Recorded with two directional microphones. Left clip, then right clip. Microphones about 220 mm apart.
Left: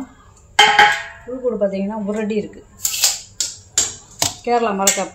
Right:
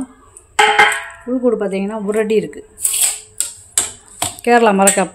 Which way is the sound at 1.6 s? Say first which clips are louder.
Even; 50° right (ahead or behind).